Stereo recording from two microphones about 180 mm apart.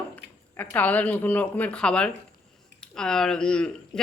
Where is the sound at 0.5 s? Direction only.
10° left (ahead or behind).